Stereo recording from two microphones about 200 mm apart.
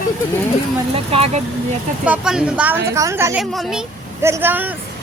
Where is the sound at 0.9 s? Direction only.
30° right (ahead or behind).